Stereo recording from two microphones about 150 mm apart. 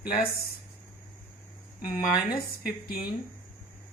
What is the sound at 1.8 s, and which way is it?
Speech, 75° left (ahead or behind).